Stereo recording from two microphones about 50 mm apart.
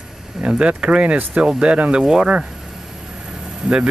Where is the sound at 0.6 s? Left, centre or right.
Centre.